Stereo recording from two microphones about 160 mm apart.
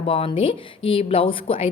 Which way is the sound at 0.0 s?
35° left (ahead or behind).